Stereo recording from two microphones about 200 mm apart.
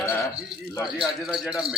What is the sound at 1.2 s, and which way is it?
Speech, centre (ahead or behind).